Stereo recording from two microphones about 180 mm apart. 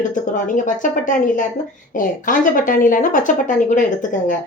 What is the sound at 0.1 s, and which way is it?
Speech, 45° left (ahead or behind).